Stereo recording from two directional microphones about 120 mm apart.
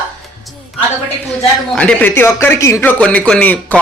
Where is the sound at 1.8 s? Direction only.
10° left (ahead or behind).